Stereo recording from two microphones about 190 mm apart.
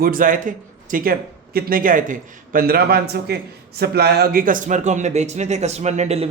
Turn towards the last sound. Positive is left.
turn(degrees=-35)  # may be behind; listen again after turning